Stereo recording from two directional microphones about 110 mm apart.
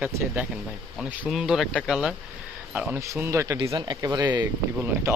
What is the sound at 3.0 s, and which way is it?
Speech, 25° right (ahead or behind).